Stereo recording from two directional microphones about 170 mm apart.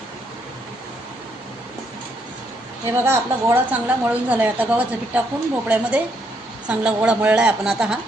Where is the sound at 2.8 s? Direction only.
15° right (ahead or behind).